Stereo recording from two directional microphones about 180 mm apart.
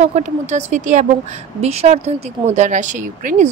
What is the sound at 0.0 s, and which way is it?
Speech, 40° right (ahead or behind).